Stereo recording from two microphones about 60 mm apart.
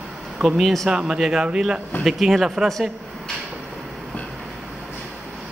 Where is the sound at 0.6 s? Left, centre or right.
Centre.